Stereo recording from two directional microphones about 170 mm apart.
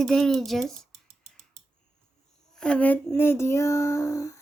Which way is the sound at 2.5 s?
5° left (ahead or behind).